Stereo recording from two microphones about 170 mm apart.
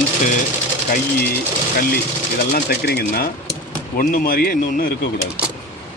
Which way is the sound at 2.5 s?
70° left (ahead or behind).